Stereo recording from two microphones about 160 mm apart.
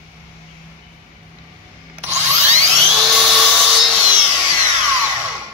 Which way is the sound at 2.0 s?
20° right (ahead or behind).